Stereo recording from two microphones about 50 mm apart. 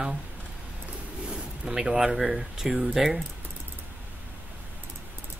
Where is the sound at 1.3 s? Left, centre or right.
Centre.